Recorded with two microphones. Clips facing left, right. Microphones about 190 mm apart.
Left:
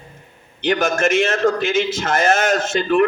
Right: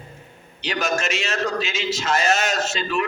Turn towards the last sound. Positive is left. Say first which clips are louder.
# left 8 dB
turn(degrees=55)  # may be behind; listen again after turning